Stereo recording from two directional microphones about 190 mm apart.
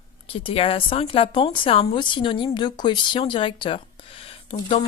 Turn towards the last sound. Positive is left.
turn(degrees=30)  # may be behind; listen again after turning